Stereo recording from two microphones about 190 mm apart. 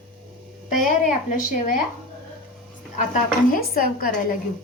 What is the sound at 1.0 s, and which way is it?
Speech, 40° left (ahead or behind).